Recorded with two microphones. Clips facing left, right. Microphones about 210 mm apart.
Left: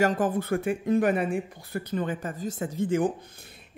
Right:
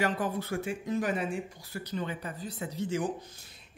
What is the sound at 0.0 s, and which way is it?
Speech, 45° left (ahead or behind).